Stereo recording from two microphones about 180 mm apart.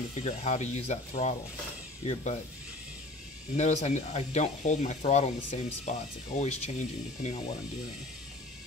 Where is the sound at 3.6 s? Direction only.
40° left (ahead or behind).